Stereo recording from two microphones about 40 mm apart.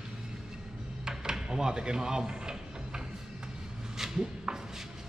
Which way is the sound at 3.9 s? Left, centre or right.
Centre.